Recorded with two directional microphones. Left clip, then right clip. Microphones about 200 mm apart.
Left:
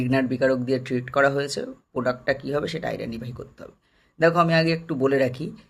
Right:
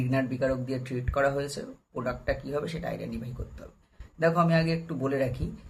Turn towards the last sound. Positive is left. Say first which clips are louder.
# left 7 dB
turn(degrees=45)  # may be behind; listen again after turning